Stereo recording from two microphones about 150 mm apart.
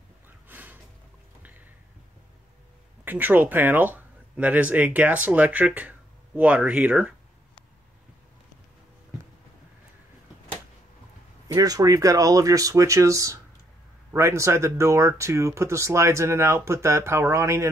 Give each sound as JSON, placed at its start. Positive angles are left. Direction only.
{"t": 0.5, "sound": "a sound", "side_deg": -10}
{"t": 3.1, "sound": "speech", "side_deg": -10}
{"t": 11.4, "sound": "speech", "side_deg": -25}